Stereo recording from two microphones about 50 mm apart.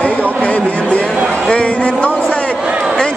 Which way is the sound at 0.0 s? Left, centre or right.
Left.